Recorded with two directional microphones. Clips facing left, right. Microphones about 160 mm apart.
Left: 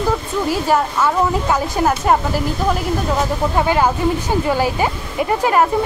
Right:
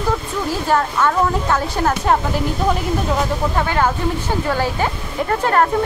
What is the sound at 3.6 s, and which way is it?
Speech, 15° left (ahead or behind).